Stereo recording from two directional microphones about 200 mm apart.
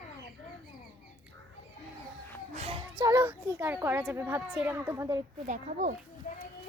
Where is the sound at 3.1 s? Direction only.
10° right (ahead or behind).